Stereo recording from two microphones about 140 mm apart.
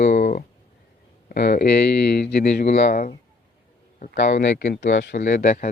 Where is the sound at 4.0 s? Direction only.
60° left (ahead or behind).